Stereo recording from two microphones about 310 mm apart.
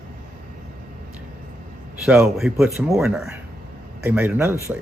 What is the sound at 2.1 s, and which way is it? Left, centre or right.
Speech, centre.